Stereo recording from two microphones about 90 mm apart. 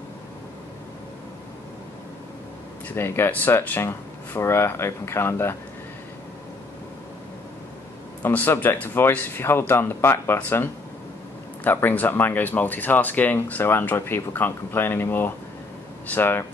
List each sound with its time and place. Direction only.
2.9 s speech: 25° left (ahead or behind)
8.2 s speech: 20° left (ahead or behind)